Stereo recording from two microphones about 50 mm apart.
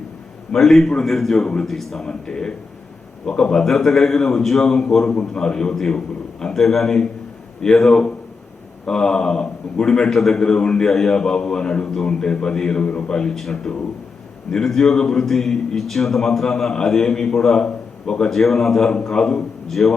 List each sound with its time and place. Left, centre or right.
0.5 s a man's voice: centre
2.0 s a man's voice: centre